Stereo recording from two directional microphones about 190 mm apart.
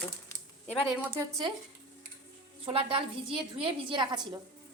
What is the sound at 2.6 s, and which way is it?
A woman's voice, 30° right (ahead or behind).